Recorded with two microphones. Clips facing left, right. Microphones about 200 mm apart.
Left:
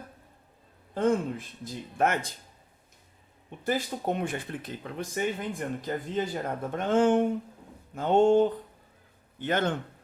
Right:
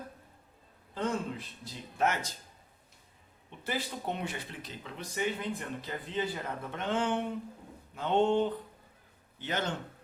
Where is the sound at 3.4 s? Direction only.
45° left (ahead or behind).